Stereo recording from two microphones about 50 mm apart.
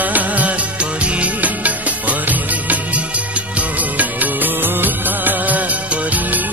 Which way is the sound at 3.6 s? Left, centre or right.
Right.